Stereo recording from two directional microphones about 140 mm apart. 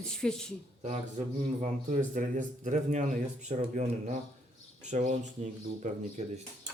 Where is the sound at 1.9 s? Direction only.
65° right (ahead or behind).